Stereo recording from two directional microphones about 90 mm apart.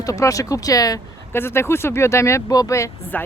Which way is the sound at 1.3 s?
25° left (ahead or behind).